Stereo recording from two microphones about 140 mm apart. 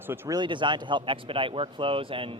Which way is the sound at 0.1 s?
30° right (ahead or behind).